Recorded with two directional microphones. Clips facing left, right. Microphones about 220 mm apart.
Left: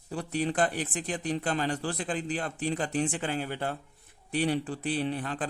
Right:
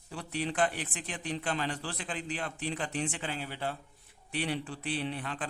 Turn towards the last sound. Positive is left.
turn(degrees=40)  # may be behind; listen again after turning